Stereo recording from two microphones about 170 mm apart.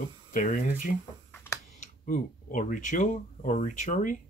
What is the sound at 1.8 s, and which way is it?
Speech, 50° left (ahead or behind).